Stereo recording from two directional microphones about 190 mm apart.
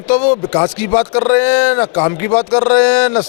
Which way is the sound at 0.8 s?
10° left (ahead or behind).